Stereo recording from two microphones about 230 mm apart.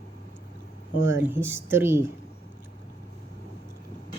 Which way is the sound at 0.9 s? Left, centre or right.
Left.